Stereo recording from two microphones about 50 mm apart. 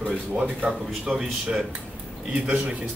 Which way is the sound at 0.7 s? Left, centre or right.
Centre.